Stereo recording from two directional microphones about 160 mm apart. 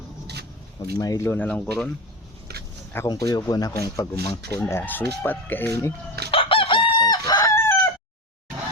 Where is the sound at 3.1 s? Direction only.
25° left (ahead or behind).